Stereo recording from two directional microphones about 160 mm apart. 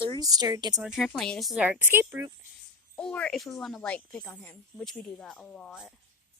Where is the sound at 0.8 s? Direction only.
Centre (ahead or behind).